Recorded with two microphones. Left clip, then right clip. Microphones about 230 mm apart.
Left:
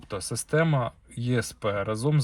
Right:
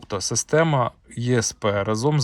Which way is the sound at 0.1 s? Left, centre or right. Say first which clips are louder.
Right 6 dB; right.